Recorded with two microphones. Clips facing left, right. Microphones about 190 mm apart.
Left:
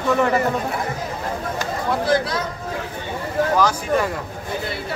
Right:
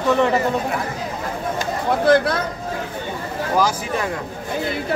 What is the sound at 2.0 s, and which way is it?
Speech, 55° right (ahead or behind).